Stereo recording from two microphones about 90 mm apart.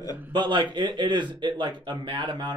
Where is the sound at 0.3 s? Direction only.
60° right (ahead or behind).